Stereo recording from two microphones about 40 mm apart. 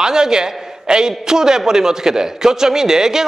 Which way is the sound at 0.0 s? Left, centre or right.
Centre.